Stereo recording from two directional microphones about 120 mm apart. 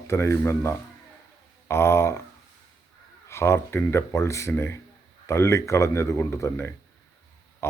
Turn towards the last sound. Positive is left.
turn(degrees=20)  # may be behind; listen again after turning